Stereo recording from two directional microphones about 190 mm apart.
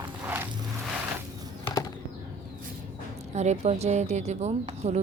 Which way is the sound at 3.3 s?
35° right (ahead or behind).